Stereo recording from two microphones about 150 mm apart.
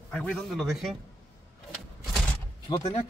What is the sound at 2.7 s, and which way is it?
Speech, 30° left (ahead or behind).